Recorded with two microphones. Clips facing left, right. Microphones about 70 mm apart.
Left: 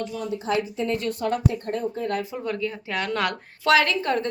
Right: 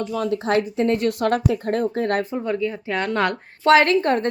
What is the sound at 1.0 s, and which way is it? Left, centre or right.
Speech, right.